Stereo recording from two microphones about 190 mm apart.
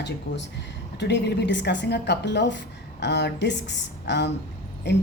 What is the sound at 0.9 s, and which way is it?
A woman's voice, 65° left (ahead or behind).